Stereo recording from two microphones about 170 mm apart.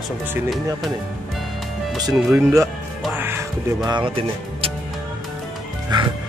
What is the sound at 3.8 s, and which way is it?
Speech, 30° right (ahead or behind).